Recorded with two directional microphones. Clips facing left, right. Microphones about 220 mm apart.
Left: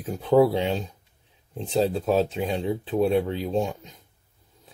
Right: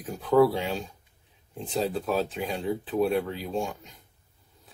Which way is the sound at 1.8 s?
25° left (ahead or behind).